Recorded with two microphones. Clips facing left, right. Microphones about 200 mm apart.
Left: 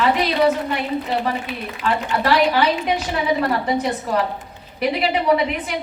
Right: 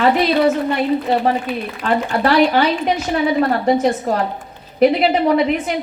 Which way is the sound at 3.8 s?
45° right (ahead or behind).